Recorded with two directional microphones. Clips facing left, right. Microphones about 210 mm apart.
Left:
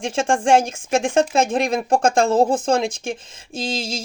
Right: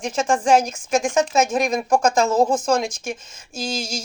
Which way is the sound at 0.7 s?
55° left (ahead or behind).